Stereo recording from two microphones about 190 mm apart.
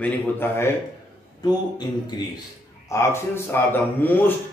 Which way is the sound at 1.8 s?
20° left (ahead or behind).